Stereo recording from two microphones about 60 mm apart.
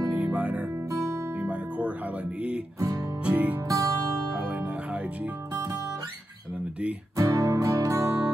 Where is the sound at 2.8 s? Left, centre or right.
Right.